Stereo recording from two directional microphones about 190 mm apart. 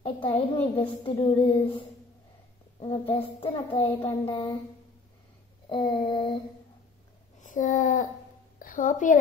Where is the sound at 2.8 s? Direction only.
30° left (ahead or behind).